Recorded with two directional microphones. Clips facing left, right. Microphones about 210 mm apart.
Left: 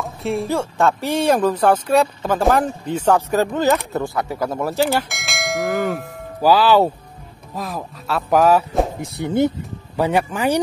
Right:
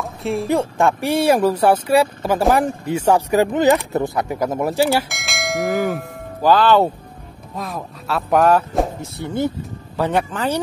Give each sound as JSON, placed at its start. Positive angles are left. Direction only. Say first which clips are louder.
{"t": 0.0, "sound": "a sound", "louder": "even", "side_deg": 0}
{"t": 0.5, "sound": "speech", "louder": "right 3 dB", "side_deg": -15}
{"t": 5.0, "sound": "bell", "louder": "even", "side_deg": 0}
{"t": 7.5, "sound": "speech", "louder": "left 1 dB", "side_deg": 0}
{"t": 9.0, "sound": "speech", "louder": "left 4 dB", "side_deg": 20}